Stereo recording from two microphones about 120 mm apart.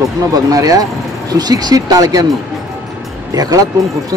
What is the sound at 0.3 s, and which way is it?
Speech, 30° right (ahead or behind).